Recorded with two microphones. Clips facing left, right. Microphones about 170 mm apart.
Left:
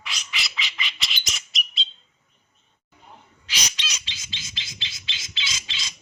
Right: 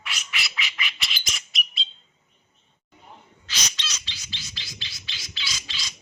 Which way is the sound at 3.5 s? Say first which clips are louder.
Left 1 dB; 15° left (ahead or behind).